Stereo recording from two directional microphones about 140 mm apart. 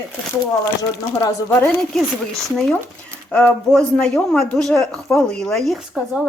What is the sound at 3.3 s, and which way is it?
Speech, 10° left (ahead or behind).